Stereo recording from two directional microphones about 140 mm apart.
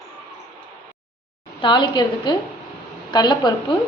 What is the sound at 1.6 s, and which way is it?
A woman's voice, 35° left (ahead or behind).